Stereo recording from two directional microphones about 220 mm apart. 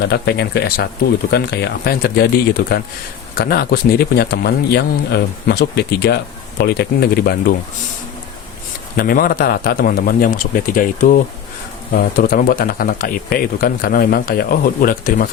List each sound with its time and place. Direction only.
0.0 s speech: 50° left (ahead or behind)
9.0 s speech: 40° left (ahead or behind)